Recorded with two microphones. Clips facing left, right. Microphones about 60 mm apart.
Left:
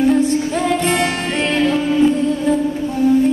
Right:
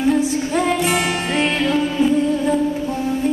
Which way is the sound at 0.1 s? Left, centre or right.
Centre.